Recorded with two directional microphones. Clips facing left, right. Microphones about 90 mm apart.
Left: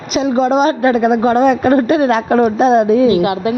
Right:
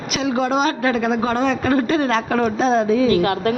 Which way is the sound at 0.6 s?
40° left (ahead or behind).